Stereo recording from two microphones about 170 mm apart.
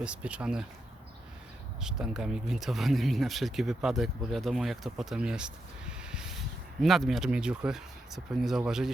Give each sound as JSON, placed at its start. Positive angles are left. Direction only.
{"t": 0.0, "sound": "speech", "side_deg": -5}
{"t": 1.8, "sound": "speech", "side_deg": -5}